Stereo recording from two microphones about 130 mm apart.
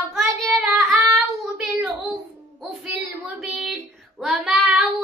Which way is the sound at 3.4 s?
Centre (ahead or behind).